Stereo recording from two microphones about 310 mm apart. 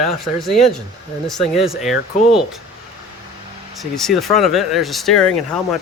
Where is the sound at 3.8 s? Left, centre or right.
Centre.